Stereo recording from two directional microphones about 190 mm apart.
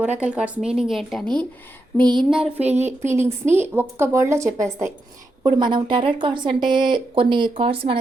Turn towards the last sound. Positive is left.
turn(degrees=-30)  # may be behind; listen again after turning